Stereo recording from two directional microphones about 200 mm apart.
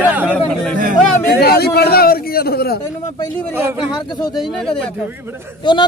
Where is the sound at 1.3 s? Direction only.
50° left (ahead or behind).